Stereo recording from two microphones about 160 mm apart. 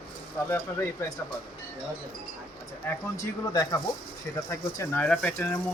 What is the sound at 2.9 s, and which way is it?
Speech, 15° left (ahead or behind).